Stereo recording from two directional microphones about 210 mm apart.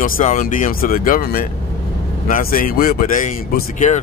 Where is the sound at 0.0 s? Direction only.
40° left (ahead or behind).